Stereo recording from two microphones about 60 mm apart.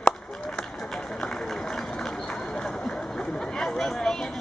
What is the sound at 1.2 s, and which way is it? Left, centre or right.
Run, centre.